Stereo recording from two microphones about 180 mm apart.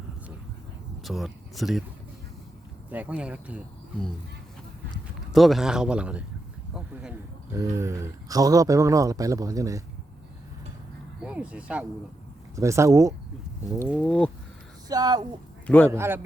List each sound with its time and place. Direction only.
1.0 s speech: centre (ahead or behind)
2.9 s speech: 10° right (ahead or behind)
5.3 s speech: centre (ahead or behind)
7.5 s speech: 15° right (ahead or behind)
11.2 s speech: 5° right (ahead or behind)
13.8 s speech: centre (ahead or behind)
14.8 s speech: 20° right (ahead or behind)
15.6 s a man's voice: 10° left (ahead or behind)
15.9 s speech: 15° right (ahead or behind)